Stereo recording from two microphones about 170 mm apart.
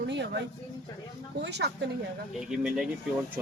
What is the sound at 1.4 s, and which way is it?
Speech, 90° right.